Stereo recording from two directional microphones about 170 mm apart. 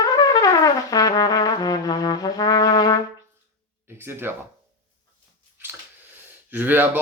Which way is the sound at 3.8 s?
15° right (ahead or behind).